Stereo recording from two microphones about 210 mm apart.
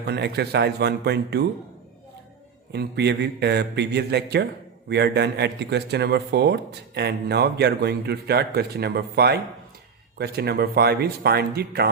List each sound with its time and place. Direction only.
0.0 s speech: 50° right (ahead or behind)
2.7 s speech: 55° right (ahead or behind)